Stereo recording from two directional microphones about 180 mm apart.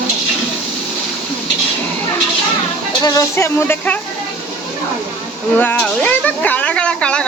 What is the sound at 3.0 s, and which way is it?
Speech, 20° left (ahead or behind).